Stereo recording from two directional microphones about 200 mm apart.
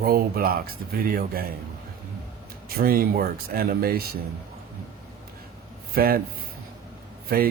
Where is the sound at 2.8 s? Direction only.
45° right (ahead or behind).